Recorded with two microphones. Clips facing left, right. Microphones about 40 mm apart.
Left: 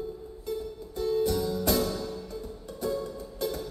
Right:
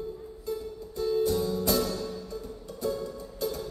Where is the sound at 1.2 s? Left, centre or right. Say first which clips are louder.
Right 1 dB; left.